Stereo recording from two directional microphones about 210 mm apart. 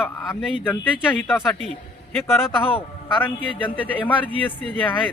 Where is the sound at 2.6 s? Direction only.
25° left (ahead or behind).